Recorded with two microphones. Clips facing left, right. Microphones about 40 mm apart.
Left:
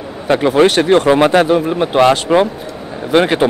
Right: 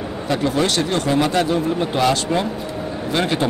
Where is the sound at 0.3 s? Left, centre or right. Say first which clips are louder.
Left 9 dB; left.